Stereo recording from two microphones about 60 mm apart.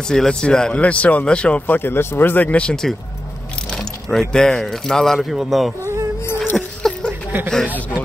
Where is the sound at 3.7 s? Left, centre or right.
Centre.